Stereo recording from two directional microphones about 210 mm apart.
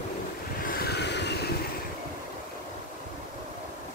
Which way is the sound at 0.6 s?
45° left (ahead or behind).